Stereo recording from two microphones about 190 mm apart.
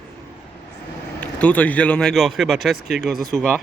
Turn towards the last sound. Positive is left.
turn(degrees=5)  # may be behind; listen again after turning